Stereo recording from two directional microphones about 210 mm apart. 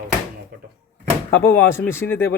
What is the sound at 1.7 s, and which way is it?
Speech, 10° left (ahead or behind).